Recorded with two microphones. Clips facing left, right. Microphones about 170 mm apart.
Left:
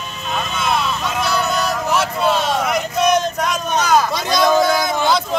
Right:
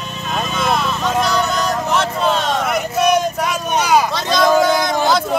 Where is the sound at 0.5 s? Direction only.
Centre (ahead or behind).